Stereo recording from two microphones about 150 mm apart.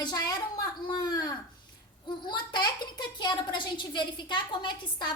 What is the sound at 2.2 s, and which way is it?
A child's voice, 30° left (ahead or behind).